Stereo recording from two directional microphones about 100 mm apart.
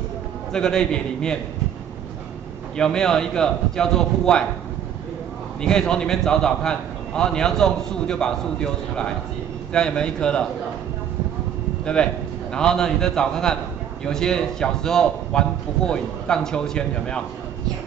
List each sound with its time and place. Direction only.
0.5 s a man's voice: 5° left (ahead or behind)
2.8 s a man's voice: 5° left (ahead or behind)
5.6 s a man's voice: 10° left (ahead or behind)
11.8 s a man's voice: 10° left (ahead or behind)